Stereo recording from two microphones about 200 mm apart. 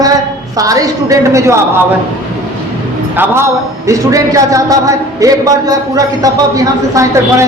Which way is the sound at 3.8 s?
15° right (ahead or behind).